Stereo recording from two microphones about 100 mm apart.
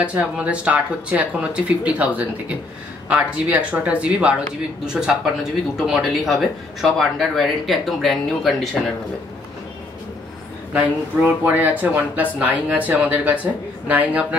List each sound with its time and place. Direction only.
0.0 s speech: 15° right (ahead or behind)
11.2 s speech: 15° right (ahead or behind)